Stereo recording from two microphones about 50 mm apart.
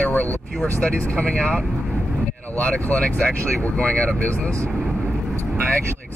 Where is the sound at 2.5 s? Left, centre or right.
Left.